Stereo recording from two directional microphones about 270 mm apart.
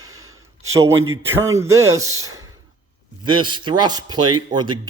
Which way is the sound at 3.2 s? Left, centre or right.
Centre.